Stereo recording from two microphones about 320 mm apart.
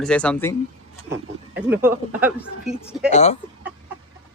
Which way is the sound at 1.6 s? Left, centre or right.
Centre.